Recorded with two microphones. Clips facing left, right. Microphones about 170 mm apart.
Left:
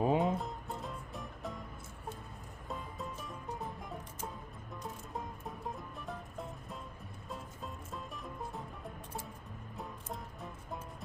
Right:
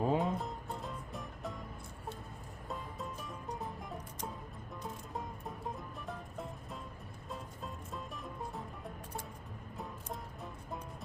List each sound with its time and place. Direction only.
0.0 s music: 15° left (ahead or behind)
0.3 s music: centre (ahead or behind)
2.6 s music: centre (ahead or behind)